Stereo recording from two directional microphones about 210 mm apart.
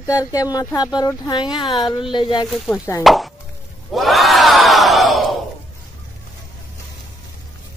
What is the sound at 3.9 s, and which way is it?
Crowd, centre (ahead or behind).